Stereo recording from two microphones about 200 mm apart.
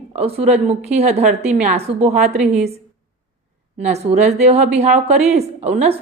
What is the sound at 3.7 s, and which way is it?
A woman's voice, 30° right (ahead or behind).